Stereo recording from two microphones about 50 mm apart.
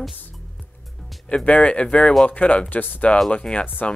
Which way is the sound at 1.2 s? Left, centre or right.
Left.